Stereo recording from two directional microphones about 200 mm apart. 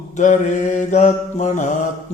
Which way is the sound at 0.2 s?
35° left (ahead or behind).